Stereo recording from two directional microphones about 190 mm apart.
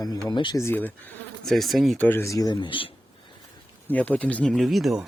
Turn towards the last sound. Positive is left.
turn(degrees=0)  # may be behind; listen again after turning